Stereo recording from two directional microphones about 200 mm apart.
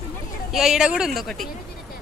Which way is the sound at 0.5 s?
Centre (ahead or behind).